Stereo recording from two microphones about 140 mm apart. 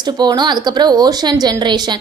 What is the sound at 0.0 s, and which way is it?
Speech, 30° right (ahead or behind).